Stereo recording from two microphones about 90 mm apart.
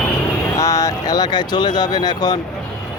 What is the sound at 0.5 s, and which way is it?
Speech, 40° left (ahead or behind).